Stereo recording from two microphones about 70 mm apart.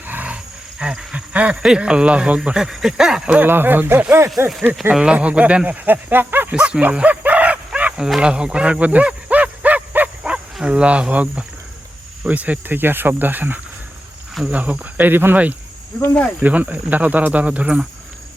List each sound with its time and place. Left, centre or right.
0.1 s wild animals: right
0.8 s speech: centre
3.3 s speech: right
4.6 s speech: centre
6.5 s a sound: centre
7.9 s a sound: centre
12.3 s speech: right